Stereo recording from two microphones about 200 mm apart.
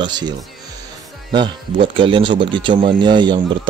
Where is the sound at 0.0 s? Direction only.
20° right (ahead or behind).